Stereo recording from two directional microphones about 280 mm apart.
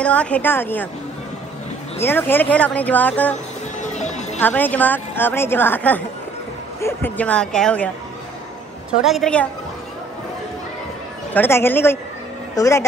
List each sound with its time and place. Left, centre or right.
0.0 s a woman's voice: centre
2.0 s speech: centre
3.8 s music: left
4.4 s a woman's voice: centre
8.9 s speech: centre
11.3 s a woman's voice: centre